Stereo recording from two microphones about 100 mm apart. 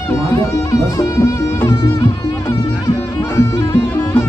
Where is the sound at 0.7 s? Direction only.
35° left (ahead or behind).